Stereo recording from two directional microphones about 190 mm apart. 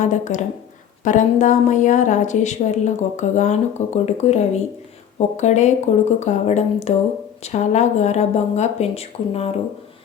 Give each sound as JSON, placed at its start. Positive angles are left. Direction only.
{"t": 0.0, "sound": "a woman's voice", "side_deg": 40}